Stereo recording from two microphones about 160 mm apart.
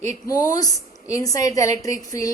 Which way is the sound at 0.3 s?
20° left (ahead or behind).